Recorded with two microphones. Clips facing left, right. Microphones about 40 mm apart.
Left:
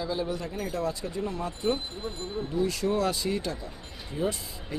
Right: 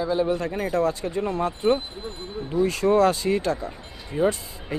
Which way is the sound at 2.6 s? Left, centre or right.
Right.